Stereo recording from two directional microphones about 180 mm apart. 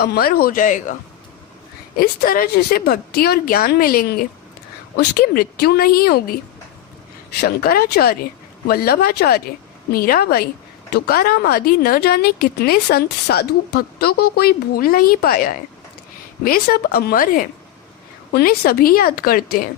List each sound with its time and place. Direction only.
0.0 s speech: 60° left (ahead or behind)
2.0 s speech: 55° left (ahead or behind)
7.4 s speech: 55° left (ahead or behind)